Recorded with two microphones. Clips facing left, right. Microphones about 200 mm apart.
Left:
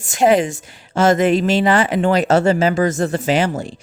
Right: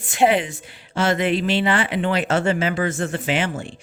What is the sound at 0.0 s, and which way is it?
A woman's voice, 45° left (ahead or behind).